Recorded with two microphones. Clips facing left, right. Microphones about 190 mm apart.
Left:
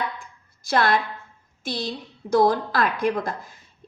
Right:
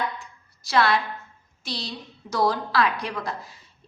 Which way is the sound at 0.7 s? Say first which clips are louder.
Left 1 dB; 50° left (ahead or behind).